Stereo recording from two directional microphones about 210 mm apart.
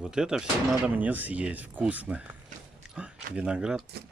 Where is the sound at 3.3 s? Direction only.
5° right (ahead or behind).